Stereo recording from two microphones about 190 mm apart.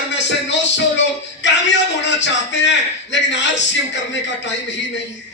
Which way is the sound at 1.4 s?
70° left (ahead or behind).